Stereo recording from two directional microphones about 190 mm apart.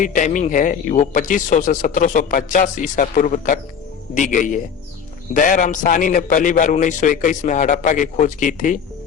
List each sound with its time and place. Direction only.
0.0 s speech: 40° left (ahead or behind)